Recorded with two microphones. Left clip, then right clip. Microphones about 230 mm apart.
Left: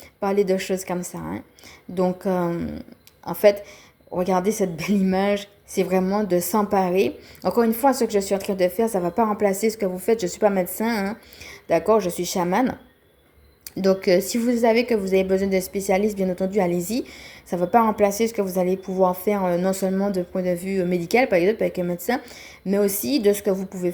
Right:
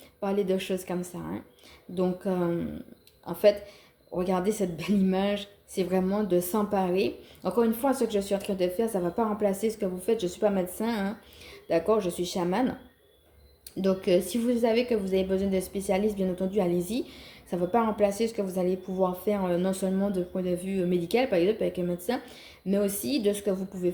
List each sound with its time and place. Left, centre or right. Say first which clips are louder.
0.4 s speech: left 6 dB; left
13.7 s speech: left 6 dB; left